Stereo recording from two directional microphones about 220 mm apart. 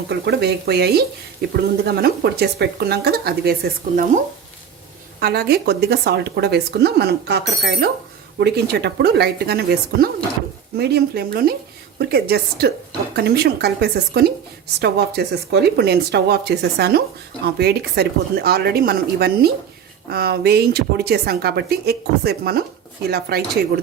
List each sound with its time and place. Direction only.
0.1 s speech: 50° right (ahead or behind)
5.2 s speech: 45° right (ahead or behind)